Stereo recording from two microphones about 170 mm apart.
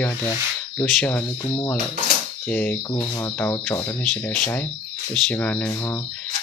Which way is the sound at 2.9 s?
25° left (ahead or behind).